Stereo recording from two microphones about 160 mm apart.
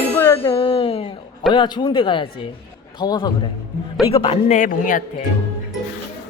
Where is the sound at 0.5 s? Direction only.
35° left (ahead or behind).